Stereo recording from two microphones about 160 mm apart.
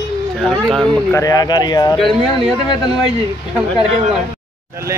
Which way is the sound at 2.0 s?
Centre (ahead or behind).